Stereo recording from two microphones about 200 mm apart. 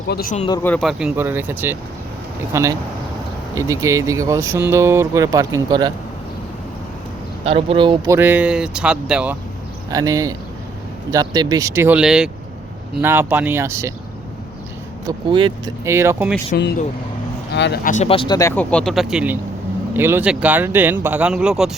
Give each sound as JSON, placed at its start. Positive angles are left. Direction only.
{"t": 0.1, "sound": "speech", "side_deg": 50}
{"t": 0.6, "sound": "speech", "side_deg": 5}
{"t": 7.4, "sound": "speech", "side_deg": -30}
{"t": 8.1, "sound": "speech", "side_deg": -10}
{"t": 9.9, "sound": "speech", "side_deg": -15}
{"t": 15.3, "sound": "speech", "side_deg": -25}
{"t": 15.8, "sound": "speech", "side_deg": -15}
{"t": 16.6, "sound": "speech", "side_deg": 55}
{"t": 17.9, "sound": "speech", "side_deg": 30}